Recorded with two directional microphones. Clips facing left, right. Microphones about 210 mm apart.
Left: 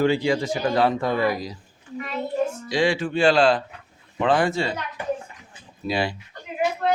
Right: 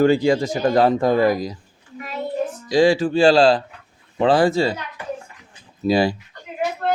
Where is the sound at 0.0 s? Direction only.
45° right (ahead or behind).